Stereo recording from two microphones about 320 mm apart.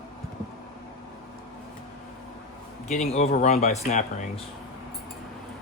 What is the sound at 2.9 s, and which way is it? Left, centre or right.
Speech, centre.